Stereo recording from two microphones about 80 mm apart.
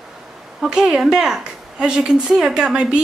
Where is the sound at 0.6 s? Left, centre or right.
Centre.